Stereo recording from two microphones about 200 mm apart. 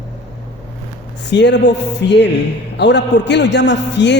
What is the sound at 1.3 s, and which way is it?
Speech, 60° left (ahead or behind).